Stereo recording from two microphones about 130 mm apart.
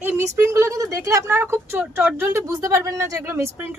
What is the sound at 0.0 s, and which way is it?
Speech, 20° right (ahead or behind).